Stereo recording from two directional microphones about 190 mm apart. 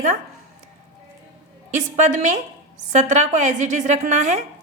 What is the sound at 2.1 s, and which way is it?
A woman's voice, 40° right (ahead or behind).